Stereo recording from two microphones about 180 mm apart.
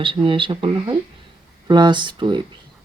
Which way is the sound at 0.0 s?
30° right (ahead or behind).